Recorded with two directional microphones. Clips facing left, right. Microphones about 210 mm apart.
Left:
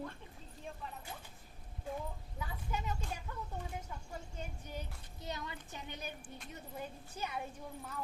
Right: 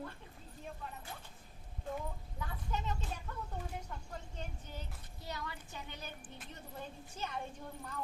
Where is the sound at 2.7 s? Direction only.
10° left (ahead or behind).